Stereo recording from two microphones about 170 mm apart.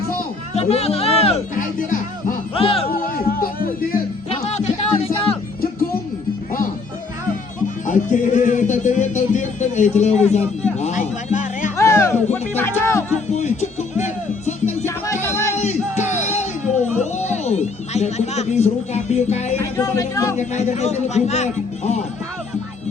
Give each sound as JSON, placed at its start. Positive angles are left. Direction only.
{"t": 0.5, "sound": "speech", "side_deg": 40}
{"t": 1.5, "sound": "speech", "side_deg": 50}
{"t": 2.6, "sound": "speech", "side_deg": 35}
{"t": 2.9, "sound": "a sound", "side_deg": 60}
{"t": 4.3, "sound": "music", "side_deg": 40}
{"t": 7.9, "sound": "speech", "side_deg": 50}
{"t": 11.8, "sound": "speech", "side_deg": 15}
{"t": 13.3, "sound": "music", "side_deg": 45}
{"t": 14.8, "sound": "music", "side_deg": 15}
{"t": 15.5, "sound": "music", "side_deg": 45}
{"t": 17.0, "sound": "a sound", "side_deg": 45}
{"t": 19.5, "sound": "music", "side_deg": 20}
{"t": 20.3, "sound": "speech", "side_deg": 45}